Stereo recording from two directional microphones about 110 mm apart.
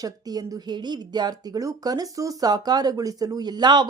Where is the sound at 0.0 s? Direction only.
35° right (ahead or behind).